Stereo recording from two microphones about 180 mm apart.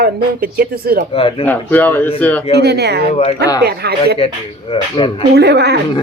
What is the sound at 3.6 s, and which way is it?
Speech, 65° right (ahead or behind).